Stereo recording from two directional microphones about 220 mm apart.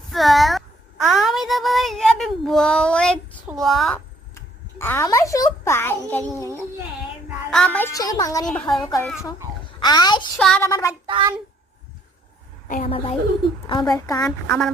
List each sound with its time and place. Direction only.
0.1 s a sound: centre (ahead or behind)
7.5 s a woman's voice: 5° left (ahead or behind)
10.3 s a woman's voice: 5° left (ahead or behind)
11.0 s a child's voice: 20° right (ahead or behind)
12.8 s a woman's voice: 25° left (ahead or behind)
14.4 s a woman's voice: centre (ahead or behind)